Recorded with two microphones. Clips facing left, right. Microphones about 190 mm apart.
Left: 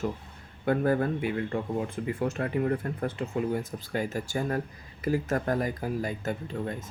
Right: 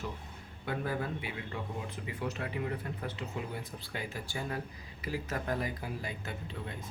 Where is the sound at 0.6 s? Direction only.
50° left (ahead or behind).